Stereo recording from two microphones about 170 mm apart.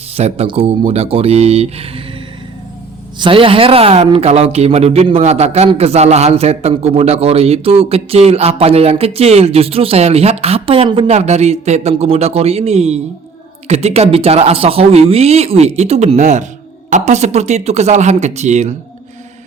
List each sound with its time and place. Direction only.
0.1 s speech: 40° right (ahead or behind)
3.2 s speech: 30° right (ahead or behind)